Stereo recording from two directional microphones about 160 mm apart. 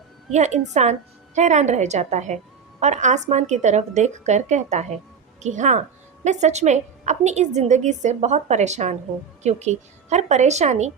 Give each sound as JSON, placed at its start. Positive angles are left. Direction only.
{"t": 0.3, "sound": "a woman's voice", "side_deg": -45}